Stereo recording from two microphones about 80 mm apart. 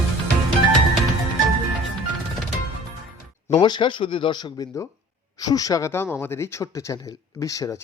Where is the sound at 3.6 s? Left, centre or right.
Left.